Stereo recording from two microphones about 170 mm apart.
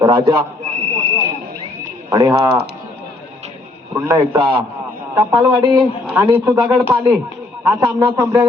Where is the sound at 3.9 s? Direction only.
15° right (ahead or behind).